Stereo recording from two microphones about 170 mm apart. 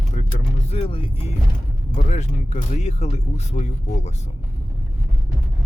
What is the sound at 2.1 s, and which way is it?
Speech, 40° left (ahead or behind).